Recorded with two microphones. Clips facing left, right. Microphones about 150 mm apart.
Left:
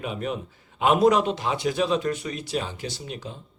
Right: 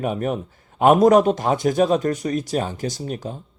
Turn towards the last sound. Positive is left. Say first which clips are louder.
# right 7 dB
turn(degrees=-45)  # may be behind; listen again after turning